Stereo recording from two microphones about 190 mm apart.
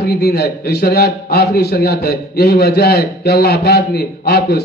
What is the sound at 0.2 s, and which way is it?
A man's voice, 55° left (ahead or behind).